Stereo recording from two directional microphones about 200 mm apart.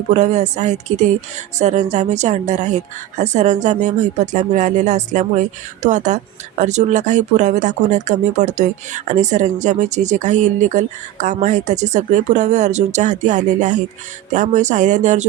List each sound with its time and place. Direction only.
0.1 s speech: 35° right (ahead or behind)